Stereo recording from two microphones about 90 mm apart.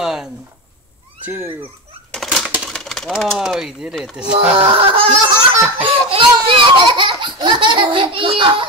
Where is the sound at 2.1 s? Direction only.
Centre (ahead or behind).